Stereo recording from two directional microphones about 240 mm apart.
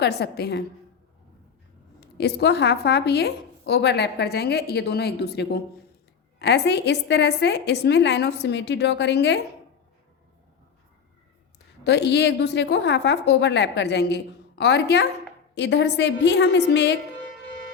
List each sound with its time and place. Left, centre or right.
0.0 s a woman's voice: left
2.0 s a woman's voice: left
11.8 s a woman's voice: left